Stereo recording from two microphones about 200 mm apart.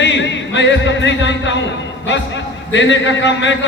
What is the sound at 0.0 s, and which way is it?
Music, 65° left (ahead or behind).